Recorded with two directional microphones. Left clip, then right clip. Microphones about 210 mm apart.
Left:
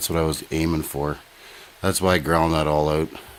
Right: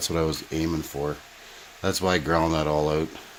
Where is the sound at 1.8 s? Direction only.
30° left (ahead or behind).